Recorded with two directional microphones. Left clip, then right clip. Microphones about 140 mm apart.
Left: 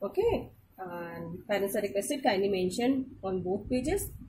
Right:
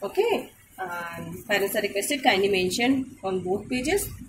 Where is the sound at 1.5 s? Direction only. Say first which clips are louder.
Right 6 dB; 65° left (ahead or behind).